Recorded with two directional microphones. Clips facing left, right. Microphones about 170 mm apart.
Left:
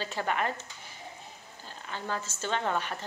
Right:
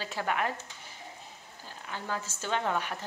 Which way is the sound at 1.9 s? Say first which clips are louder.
Left 1 dB; 10° right (ahead or behind).